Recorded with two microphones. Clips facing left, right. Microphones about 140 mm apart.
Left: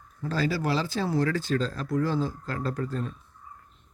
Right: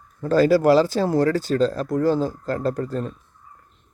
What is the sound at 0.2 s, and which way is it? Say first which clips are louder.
Speech: right 11 dB; 50° right (ahead or behind).